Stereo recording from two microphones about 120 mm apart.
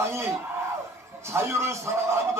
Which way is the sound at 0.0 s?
20° right (ahead or behind).